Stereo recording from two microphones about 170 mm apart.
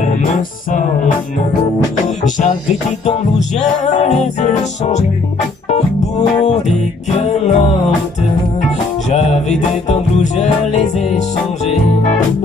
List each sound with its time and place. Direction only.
0.0 s music: 50° left (ahead or behind)
2.2 s music: 45° left (ahead or behind)
7.1 s music: 40° left (ahead or behind)
9.1 s music: 45° left (ahead or behind)